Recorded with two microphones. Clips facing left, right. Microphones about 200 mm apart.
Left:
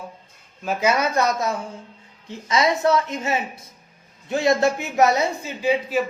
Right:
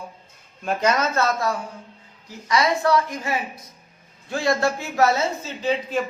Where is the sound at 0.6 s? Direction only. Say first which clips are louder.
Left 1 dB; 5° left (ahead or behind).